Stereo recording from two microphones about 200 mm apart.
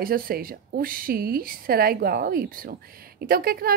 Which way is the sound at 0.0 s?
45° right (ahead or behind).